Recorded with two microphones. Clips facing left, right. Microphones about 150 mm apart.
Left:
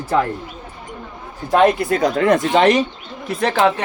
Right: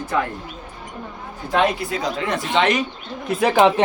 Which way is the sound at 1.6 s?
50° left (ahead or behind).